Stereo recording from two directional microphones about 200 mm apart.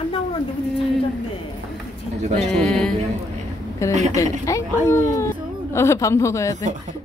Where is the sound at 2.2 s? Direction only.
35° right (ahead or behind).